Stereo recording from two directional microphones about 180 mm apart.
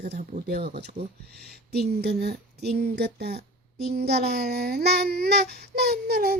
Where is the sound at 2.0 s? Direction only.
65° right (ahead or behind).